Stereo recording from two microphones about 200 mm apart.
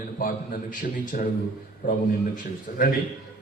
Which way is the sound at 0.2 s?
45° left (ahead or behind).